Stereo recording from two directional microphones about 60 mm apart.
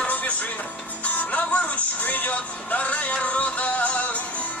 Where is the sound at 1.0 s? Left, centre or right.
Left.